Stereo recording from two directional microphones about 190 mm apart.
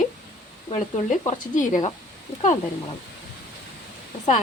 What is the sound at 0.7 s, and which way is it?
Speech, 40° left (ahead or behind).